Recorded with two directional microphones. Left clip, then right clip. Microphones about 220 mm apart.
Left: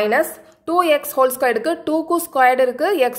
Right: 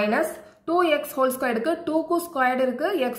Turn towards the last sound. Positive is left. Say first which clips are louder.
# left 7 dB
turn(degrees=45)  # may be behind; listen again after turning